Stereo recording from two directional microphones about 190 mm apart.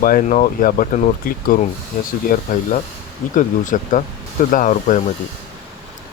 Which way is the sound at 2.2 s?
45° left (ahead or behind).